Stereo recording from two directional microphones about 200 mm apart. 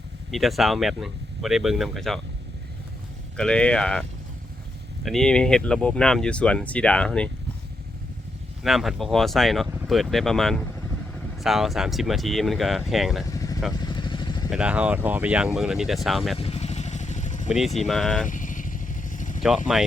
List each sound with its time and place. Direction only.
0.3 s speech: centre (ahead or behind)
3.3 s speech: 5° left (ahead or behind)
5.0 s speech: centre (ahead or behind)
8.6 s speech: centre (ahead or behind)
13.3 s vehicle: 15° left (ahead or behind)
14.5 s speech: 5° right (ahead or behind)
16.4 s vehicle: 30° left (ahead or behind)
17.8 s speech: centre (ahead or behind)
18.3 s motorcycle: 40° left (ahead or behind)
19.4 s speech: centre (ahead or behind)